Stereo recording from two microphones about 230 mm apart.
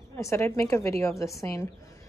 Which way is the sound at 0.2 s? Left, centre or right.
Centre.